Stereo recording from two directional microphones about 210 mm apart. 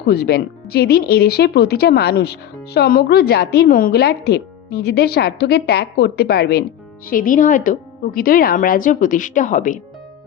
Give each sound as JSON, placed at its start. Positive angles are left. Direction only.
{"t": 0.0, "sound": "speech", "side_deg": 50}
{"t": 7.1, "sound": "a woman's voice", "side_deg": 40}